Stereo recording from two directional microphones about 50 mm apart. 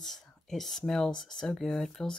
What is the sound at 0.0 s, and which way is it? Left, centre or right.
Speech, centre.